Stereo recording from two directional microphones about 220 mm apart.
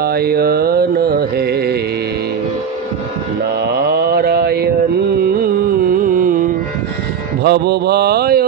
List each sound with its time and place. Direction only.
0.0 s music: 45° right (ahead or behind)
3.7 s mantra: 45° right (ahead or behind)
6.0 s carnatic music: 35° right (ahead or behind)
7.4 s mantra: 45° right (ahead or behind)